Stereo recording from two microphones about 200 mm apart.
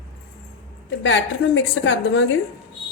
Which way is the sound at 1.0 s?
70° left (ahead or behind).